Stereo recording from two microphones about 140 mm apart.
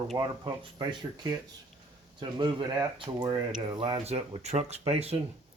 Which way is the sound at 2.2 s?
35° right (ahead or behind).